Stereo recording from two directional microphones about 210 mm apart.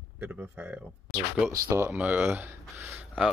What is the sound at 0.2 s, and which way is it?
Speech, 10° right (ahead or behind).